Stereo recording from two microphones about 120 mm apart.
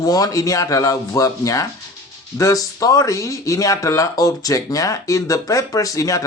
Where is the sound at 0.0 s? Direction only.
30° left (ahead or behind).